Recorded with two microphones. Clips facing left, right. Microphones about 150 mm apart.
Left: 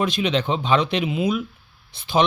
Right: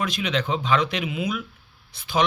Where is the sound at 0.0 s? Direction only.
25° left (ahead or behind).